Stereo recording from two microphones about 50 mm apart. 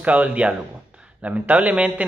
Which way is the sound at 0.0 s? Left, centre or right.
Right.